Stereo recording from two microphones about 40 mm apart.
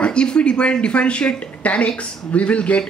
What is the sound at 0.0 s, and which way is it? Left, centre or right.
Speech, left.